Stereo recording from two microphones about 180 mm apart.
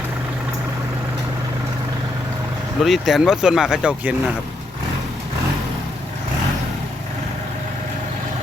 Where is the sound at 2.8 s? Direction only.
Centre (ahead or behind).